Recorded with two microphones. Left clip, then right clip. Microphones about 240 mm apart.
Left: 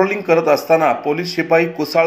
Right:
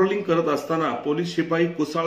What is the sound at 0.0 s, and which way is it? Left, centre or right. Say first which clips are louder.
A man's voice: left 6 dB; centre.